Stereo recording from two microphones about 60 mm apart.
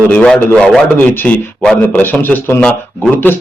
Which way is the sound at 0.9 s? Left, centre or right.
Left.